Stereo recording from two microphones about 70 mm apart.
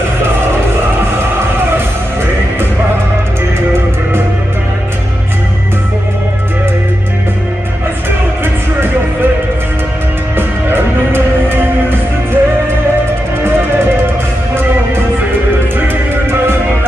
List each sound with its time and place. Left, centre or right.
10.3 s music: right
13.4 s music: right